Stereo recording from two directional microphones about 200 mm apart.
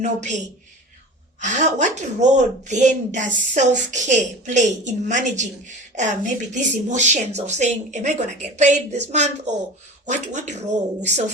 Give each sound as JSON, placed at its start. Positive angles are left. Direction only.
{"t": 0.0, "sound": "a woman's voice", "side_deg": -35}